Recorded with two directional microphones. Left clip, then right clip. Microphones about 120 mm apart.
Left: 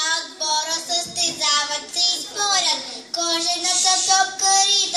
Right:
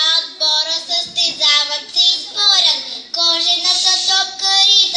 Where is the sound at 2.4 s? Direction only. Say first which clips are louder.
Right 8 dB; 25° right (ahead or behind).